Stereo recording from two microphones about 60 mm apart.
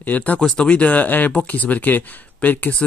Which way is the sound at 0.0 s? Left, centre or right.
Left.